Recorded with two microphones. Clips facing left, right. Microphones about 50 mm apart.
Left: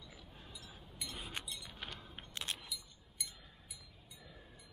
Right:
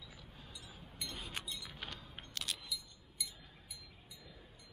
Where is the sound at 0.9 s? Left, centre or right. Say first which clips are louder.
Even; centre.